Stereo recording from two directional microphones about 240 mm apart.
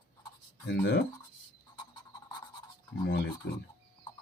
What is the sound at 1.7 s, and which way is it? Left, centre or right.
Frog, centre.